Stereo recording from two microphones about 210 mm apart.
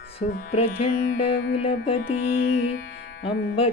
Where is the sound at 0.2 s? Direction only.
45° left (ahead or behind).